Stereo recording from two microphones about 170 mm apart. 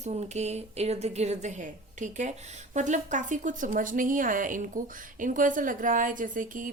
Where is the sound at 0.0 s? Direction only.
40° right (ahead or behind).